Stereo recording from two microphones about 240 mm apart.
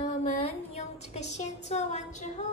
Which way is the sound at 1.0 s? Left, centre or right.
Left.